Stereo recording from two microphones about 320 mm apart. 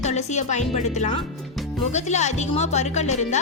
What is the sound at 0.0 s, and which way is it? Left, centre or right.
Speech, left.